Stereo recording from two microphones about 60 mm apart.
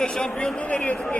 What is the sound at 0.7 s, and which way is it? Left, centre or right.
Speech, left.